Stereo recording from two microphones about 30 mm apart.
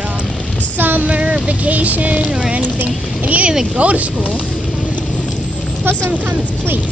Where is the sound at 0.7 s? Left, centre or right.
Right.